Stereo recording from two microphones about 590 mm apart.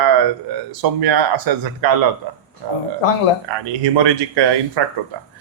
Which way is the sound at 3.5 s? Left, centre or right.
Right.